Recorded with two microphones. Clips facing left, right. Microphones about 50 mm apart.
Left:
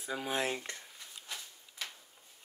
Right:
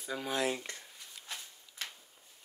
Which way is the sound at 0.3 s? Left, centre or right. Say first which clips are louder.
Right 2 dB; left.